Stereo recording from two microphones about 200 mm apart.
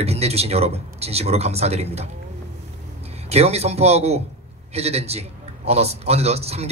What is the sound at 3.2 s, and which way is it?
Speech, 30° right (ahead or behind).